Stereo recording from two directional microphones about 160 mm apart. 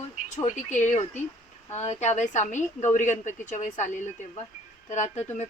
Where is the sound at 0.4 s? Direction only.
50° left (ahead or behind).